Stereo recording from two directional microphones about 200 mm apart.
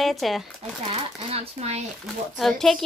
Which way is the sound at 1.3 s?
30° right (ahead or behind).